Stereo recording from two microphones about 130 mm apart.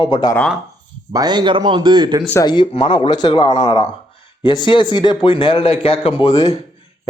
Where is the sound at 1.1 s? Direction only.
30° right (ahead or behind).